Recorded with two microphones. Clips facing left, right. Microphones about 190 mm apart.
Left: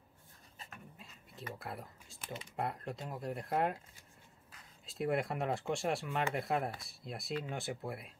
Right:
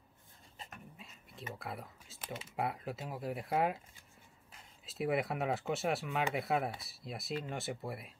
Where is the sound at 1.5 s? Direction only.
Centre (ahead or behind).